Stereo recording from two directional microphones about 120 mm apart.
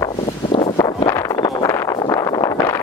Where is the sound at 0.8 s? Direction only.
25° left (ahead or behind).